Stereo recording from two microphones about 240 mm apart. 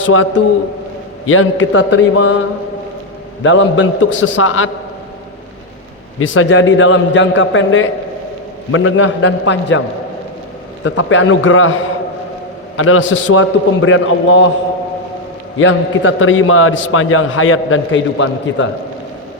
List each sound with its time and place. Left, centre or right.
0.1 s a man's voice: left
3.4 s a man's voice: left
6.1 s a man's voice: left
10.8 s a man's voice: left
12.7 s a man's voice: left
15.5 s a man's voice: left